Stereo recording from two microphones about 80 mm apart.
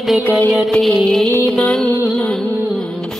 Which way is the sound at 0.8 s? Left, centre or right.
Centre.